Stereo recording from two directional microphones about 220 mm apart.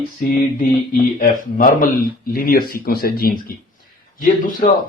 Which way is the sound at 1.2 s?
40° left (ahead or behind).